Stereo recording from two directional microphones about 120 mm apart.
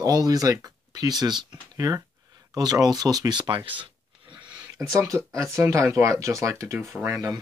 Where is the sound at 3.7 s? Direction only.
45° right (ahead or behind).